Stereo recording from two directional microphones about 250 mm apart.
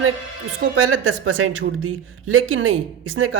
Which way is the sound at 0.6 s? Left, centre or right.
Right.